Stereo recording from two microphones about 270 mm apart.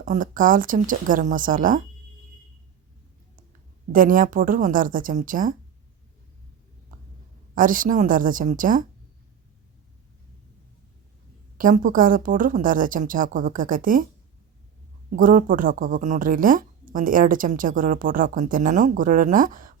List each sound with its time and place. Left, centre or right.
0.0 s speech: right
3.9 s speech: right
7.5 s speech: right
11.5 s speech: right
15.1 s speech: right